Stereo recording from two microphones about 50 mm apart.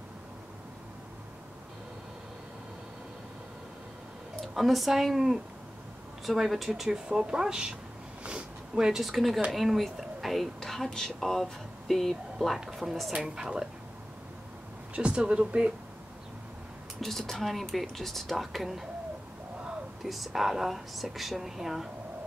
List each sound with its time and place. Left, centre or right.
4.6 s a woman's voice: centre
8.2 s a sound: right
9.0 s a woman's voice: centre
15.0 s speech: right
17.0 s speech: centre
20.0 s speech: centre